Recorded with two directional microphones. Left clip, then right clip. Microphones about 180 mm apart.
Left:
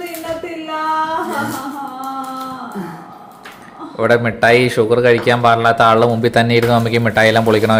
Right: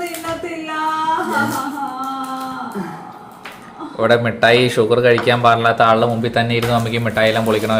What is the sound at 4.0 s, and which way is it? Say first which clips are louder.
Speech: left 1 dB; 10° left (ahead or behind).